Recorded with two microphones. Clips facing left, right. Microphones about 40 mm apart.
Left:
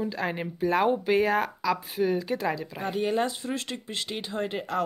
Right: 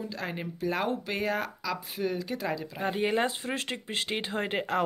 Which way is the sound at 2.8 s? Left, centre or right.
Right.